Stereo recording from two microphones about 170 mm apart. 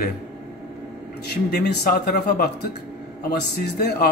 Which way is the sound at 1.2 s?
75° left (ahead or behind).